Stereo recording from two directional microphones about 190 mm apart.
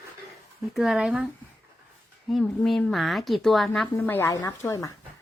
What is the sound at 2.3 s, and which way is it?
A woman's voice, centre (ahead or behind).